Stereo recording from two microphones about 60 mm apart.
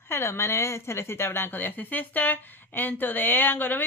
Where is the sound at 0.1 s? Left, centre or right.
Left.